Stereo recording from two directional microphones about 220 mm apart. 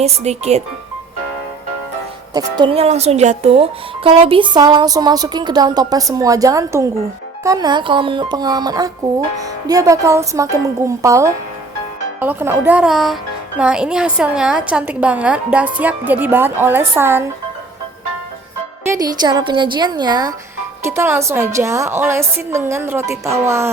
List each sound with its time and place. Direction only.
0.0 s speech: 30° right (ahead or behind)
2.3 s a woman's voice: 20° right (ahead or behind)
18.9 s a woman's voice: 15° right (ahead or behind)